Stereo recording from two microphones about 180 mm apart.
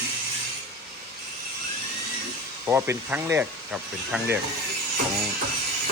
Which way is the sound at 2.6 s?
10° right (ahead or behind).